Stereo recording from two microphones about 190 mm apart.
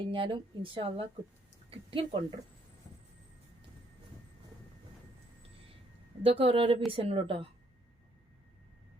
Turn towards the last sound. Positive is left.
turn(degrees=-30)  # may be behind; listen again after turning